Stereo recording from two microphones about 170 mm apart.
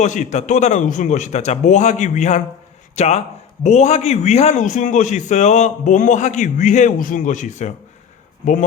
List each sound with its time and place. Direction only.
0.0 s a man's voice: 45° left (ahead or behind)